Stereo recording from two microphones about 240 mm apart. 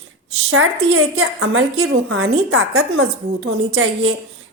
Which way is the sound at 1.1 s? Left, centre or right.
Right.